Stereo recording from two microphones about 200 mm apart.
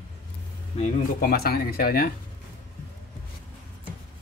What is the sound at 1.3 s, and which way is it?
Speech, 50° left (ahead or behind).